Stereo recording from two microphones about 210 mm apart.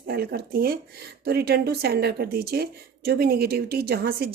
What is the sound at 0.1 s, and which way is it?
Speech, 50° right (ahead or behind).